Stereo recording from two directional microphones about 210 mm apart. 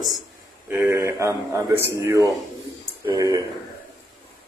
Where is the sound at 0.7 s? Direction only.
10° right (ahead or behind).